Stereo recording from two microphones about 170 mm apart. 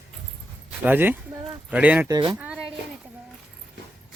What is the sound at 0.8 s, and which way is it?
A man's voice, 10° right (ahead or behind).